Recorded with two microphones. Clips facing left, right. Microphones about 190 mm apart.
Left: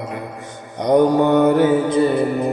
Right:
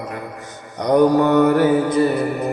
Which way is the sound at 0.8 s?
20° left (ahead or behind).